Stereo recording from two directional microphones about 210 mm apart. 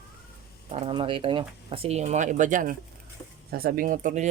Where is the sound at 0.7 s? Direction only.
30° right (ahead or behind).